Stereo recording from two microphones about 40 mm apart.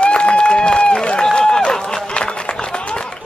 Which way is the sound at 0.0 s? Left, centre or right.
Left.